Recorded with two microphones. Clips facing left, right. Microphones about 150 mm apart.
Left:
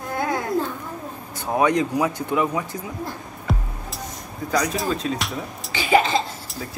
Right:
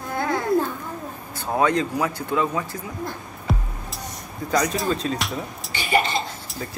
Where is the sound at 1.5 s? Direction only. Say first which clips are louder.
Left 1 dB; 15° left (ahead or behind).